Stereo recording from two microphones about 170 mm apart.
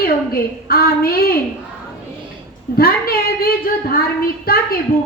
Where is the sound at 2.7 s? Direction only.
60° left (ahead or behind).